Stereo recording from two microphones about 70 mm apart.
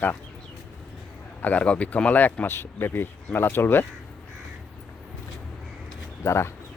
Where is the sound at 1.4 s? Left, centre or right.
Centre.